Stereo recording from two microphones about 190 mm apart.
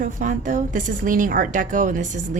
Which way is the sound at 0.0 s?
45° right (ahead or behind).